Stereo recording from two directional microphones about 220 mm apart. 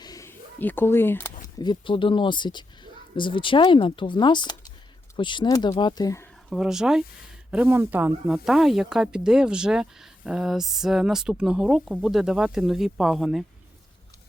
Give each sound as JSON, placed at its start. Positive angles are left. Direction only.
{"t": 0.0, "sound": "speech", "side_deg": 15}
{"t": 6.5, "sound": "speech", "side_deg": 0}